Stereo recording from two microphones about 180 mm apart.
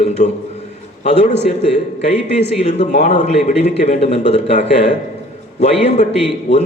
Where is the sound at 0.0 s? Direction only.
35° left (ahead or behind).